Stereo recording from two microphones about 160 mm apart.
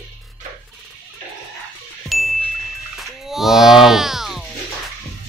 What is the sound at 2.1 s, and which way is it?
Ding, centre (ahead or behind).